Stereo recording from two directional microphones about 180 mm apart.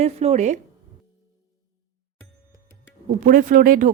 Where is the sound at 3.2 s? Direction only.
45° right (ahead or behind).